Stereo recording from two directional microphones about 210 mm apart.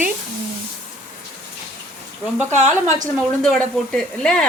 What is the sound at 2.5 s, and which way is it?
Speech, 35° right (ahead or behind).